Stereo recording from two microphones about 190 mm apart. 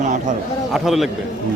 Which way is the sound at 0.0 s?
40° right (ahead or behind).